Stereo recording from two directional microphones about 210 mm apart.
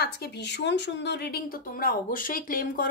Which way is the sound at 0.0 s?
50° left (ahead or behind).